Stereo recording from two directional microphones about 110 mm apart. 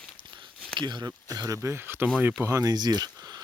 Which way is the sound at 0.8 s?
40° right (ahead or behind).